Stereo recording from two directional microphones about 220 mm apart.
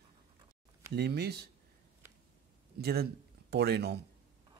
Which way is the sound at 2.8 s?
45° right (ahead or behind).